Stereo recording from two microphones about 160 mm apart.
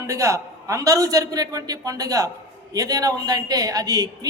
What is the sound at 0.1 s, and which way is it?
A woman's voice, 20° right (ahead or behind).